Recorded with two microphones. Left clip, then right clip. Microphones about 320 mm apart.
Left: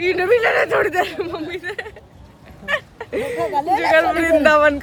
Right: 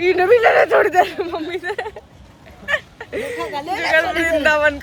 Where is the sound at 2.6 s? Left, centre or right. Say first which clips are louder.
Right 1 dB; centre.